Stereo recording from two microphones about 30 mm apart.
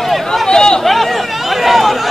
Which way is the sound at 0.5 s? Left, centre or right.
Left.